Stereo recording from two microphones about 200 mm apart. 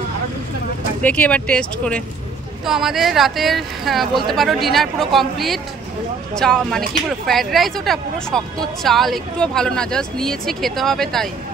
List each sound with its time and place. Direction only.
1.0 s speech: 5° left (ahead or behind)